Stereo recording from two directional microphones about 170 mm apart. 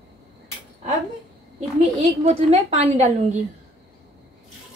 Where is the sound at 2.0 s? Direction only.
40° right (ahead or behind).